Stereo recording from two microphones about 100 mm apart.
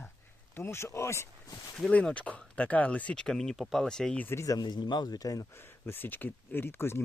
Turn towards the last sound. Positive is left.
turn(degrees=25)  # may be behind; listen again after turning